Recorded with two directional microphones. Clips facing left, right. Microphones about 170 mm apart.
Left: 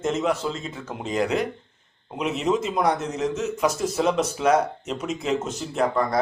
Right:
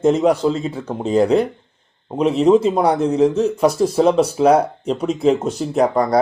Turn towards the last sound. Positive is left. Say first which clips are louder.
# right 7 dB
turn(degrees=-40)  # may be behind; listen again after turning